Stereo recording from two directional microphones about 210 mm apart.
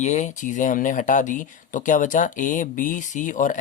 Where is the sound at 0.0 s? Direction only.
35° left (ahead or behind).